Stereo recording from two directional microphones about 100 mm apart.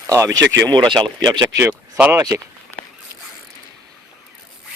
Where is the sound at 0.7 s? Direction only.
45° right (ahead or behind).